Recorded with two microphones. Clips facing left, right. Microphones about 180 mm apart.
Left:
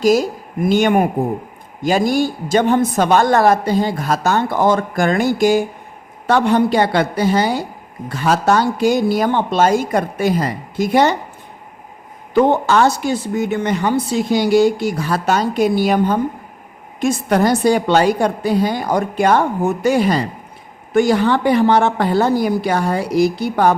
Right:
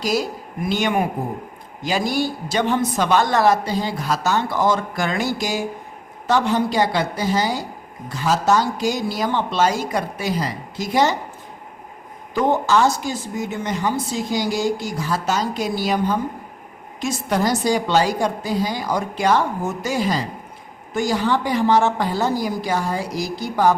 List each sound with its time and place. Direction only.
0.0 s a woman's voice: 45° left (ahead or behind)
12.3 s a woman's voice: 65° left (ahead or behind)